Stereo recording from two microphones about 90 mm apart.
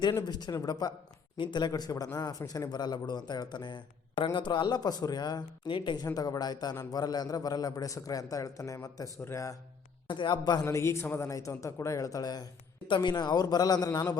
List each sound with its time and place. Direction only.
0.3 s a man's voice: 50° left (ahead or behind)
1.4 s a man's voice: 55° left (ahead or behind)
6.1 s a man's voice: 45° left (ahead or behind)
10.1 s speech: 60° left (ahead or behind)
10.7 s a man's voice: 30° left (ahead or behind)